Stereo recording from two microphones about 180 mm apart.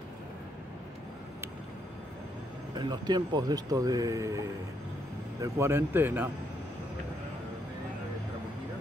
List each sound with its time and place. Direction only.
2.7 s speech: 25° right (ahead or behind)